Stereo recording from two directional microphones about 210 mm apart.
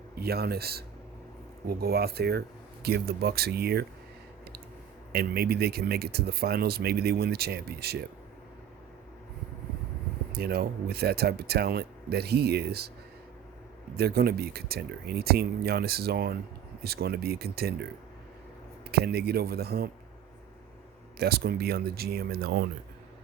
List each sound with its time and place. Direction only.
0.2 s speech: 50° right (ahead or behind)
5.1 s speech: 50° right (ahead or behind)
10.3 s speech: 50° right (ahead or behind)
13.9 s speech: 50° right (ahead or behind)
18.9 s speech: 50° right (ahead or behind)
21.2 s speech: 50° right (ahead or behind)